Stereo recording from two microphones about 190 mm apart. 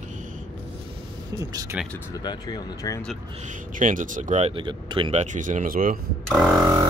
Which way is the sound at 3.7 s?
45° right (ahead or behind).